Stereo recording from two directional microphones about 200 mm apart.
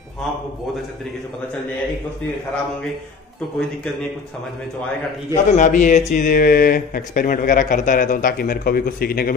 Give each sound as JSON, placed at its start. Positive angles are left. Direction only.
{"t": 5.3, "sound": "speech", "side_deg": 40}